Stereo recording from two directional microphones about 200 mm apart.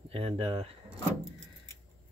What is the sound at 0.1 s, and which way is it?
Speech, 30° right (ahead or behind).